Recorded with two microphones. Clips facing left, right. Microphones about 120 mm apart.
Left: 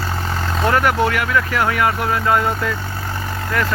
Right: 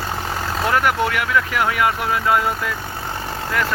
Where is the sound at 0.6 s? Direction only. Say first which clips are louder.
Left 2 dB; 5° right (ahead or behind).